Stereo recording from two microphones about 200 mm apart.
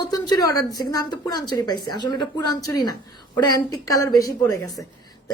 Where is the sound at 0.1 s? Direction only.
20° left (ahead or behind).